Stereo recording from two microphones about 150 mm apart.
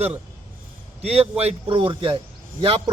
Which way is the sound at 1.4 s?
40° right (ahead or behind).